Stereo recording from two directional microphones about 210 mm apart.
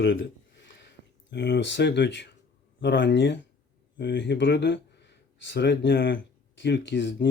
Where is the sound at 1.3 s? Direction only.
55° left (ahead or behind).